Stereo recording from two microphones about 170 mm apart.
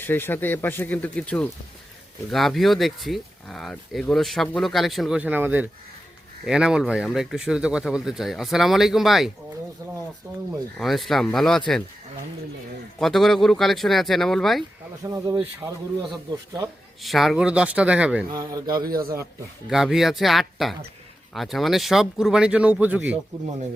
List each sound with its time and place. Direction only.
0.0 s speech: 10° left (ahead or behind)
10.8 s speech: centre (ahead or behind)
13.0 s speech: centre (ahead or behind)
15.0 s speech: 20° right (ahead or behind)
17.0 s speech: centre (ahead or behind)
18.3 s speech: 20° right (ahead or behind)
18.8 s speech: 60° right (ahead or behind)
19.7 s speech: centre (ahead or behind)